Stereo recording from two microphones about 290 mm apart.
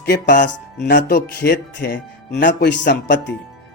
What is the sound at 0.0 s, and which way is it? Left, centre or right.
Speech, left.